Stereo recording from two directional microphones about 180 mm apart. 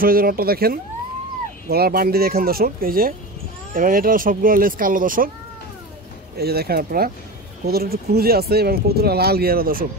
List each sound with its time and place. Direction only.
0.0 s speech: 55° right (ahead or behind)
6.3 s speech: 60° right (ahead or behind)